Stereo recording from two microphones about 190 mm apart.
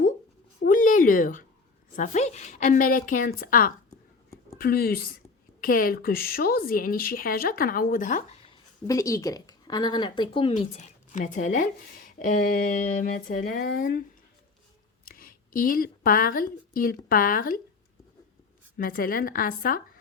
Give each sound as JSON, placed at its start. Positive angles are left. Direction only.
{"t": 0.6, "sound": "a sound", "side_deg": 45}
{"t": 2.0, "sound": "speech", "side_deg": 40}
{"t": 8.4, "sound": "a woman's voice", "side_deg": 15}
{"t": 10.5, "sound": "speech", "side_deg": 40}
{"t": 15.0, "sound": "a woman's voice", "side_deg": 50}
{"t": 18.8, "sound": "speech", "side_deg": 50}